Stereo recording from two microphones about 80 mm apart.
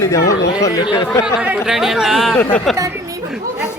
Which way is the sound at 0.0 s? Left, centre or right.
Left.